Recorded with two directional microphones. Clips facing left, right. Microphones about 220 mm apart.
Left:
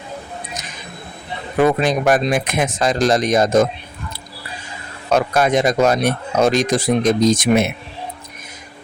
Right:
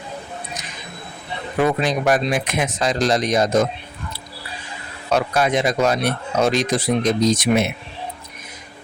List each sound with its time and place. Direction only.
1.6 s speech: 50° left (ahead or behind)
5.1 s speech: 45° left (ahead or behind)